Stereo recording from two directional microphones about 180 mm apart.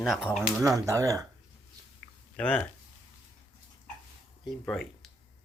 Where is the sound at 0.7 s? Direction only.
15° right (ahead or behind).